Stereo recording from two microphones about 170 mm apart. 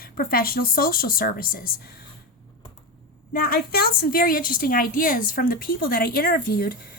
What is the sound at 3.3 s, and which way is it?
A woman's voice, 60° left (ahead or behind).